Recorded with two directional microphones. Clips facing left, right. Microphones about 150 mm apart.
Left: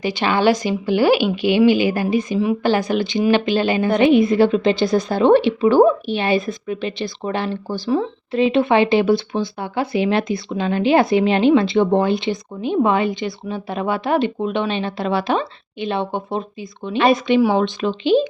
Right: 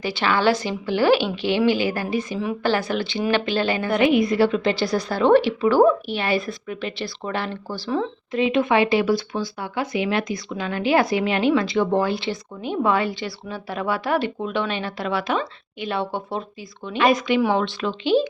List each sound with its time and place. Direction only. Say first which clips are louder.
0.0 s a woman's voice: left 3 dB; 20° left (ahead or behind)
8.3 s speech: left 4 dB; 30° left (ahead or behind)